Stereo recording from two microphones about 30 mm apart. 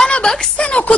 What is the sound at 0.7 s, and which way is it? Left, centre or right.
Speech, left.